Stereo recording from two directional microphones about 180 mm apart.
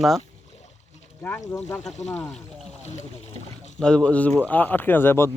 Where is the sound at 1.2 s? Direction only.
10° left (ahead or behind).